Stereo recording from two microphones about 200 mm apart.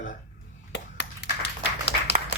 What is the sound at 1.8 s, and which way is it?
Applause, 60° left (ahead or behind).